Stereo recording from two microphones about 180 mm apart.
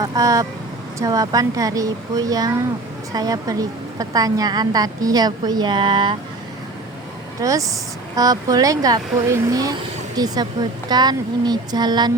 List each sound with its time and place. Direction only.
0.0 s a woman's voice: 20° right (ahead or behind)
7.4 s a woman's voice: 20° right (ahead or behind)